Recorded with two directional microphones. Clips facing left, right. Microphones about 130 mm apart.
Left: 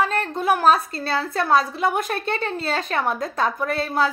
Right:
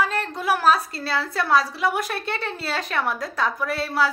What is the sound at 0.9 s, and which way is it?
Speech, 50° left (ahead or behind).